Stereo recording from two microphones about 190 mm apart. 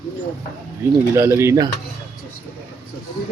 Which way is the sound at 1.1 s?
15° right (ahead or behind).